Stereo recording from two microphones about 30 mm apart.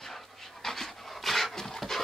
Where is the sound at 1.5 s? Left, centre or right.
Centre.